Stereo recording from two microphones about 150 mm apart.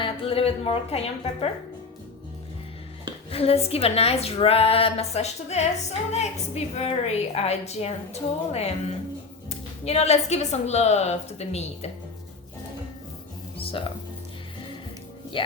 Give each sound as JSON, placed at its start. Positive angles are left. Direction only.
{"t": 0.0, "sound": "a woman's voice", "side_deg": 40}
{"t": 3.2, "sound": "a woman's voice", "side_deg": 40}
{"t": 9.8, "sound": "a woman's voice", "side_deg": 45}
{"t": 13.6, "sound": "music", "side_deg": 40}
{"t": 15.3, "sound": "a woman's voice", "side_deg": 35}